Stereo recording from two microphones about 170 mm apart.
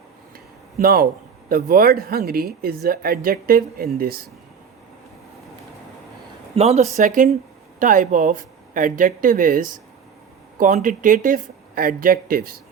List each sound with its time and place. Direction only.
0.3 s a sound: 60° right (ahead or behind)
1.5 s speech: 60° right (ahead or behind)
6.6 s speech: 40° right (ahead or behind); by 12.5 s 60° right (ahead or behind)